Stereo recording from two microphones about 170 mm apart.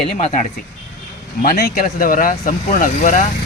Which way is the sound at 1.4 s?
55° left (ahead or behind).